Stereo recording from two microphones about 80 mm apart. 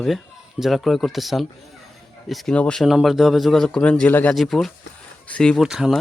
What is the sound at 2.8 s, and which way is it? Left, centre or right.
A man's voice, centre.